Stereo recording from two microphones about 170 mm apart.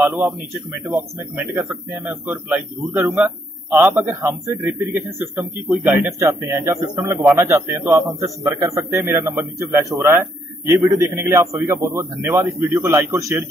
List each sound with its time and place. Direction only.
0.0 s speech: 15° right (ahead or behind)